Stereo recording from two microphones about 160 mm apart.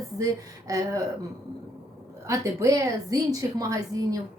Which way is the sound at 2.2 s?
20° right (ahead or behind).